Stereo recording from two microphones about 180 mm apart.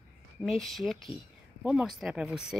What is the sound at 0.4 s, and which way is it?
Speech, centre (ahead or behind).